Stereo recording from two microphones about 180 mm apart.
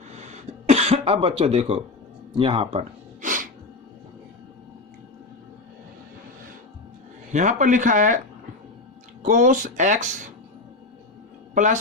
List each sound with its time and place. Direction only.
0.2 s cough: 40° right (ahead or behind)
2.3 s speech: 30° right (ahead or behind)
3.2 s a sound: 45° right (ahead or behind)
7.3 s speech: 45° right (ahead or behind)
9.2 s speech: 45° right (ahead or behind)
11.5 s a woman's voice: 45° right (ahead or behind)